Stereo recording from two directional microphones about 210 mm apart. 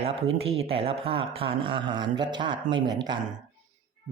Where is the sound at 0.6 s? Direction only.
25° right (ahead or behind).